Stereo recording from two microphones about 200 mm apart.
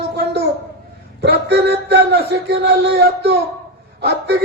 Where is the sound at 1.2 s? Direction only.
55° right (ahead or behind).